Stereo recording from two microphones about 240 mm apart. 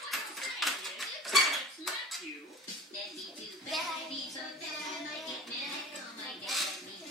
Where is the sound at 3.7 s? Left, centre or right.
Centre.